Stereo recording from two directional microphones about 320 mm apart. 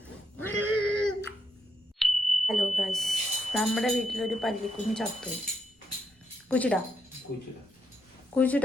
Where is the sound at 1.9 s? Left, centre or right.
Centre.